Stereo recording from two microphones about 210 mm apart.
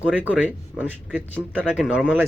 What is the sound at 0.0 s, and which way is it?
Speech, 5° right (ahead or behind).